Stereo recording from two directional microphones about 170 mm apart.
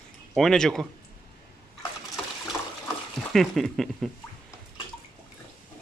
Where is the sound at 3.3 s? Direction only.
Centre (ahead or behind).